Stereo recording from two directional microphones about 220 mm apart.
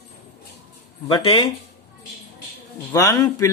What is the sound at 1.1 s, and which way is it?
Speech, 20° left (ahead or behind).